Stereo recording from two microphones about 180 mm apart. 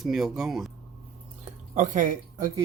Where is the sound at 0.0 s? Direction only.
Centre (ahead or behind).